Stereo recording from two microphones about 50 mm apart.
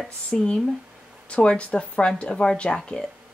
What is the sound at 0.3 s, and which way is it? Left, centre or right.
Speech, centre.